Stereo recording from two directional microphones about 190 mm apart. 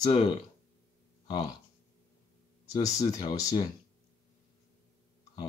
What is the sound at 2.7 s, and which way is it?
Speech, 20° left (ahead or behind).